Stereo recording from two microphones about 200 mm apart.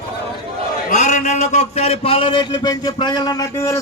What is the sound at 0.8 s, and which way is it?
A man's voice, 35° left (ahead or behind).